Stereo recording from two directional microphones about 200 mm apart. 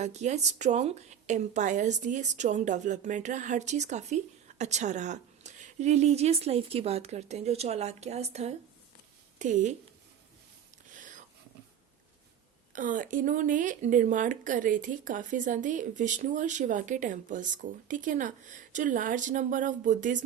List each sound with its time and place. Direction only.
0.0 s a woman's voice: 35° right (ahead or behind)
12.7 s a woman's voice: 40° right (ahead or behind)